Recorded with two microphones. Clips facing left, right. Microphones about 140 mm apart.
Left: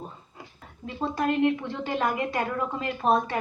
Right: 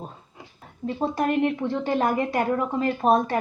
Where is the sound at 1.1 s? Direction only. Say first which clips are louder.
Left 1 dB; 55° right (ahead or behind).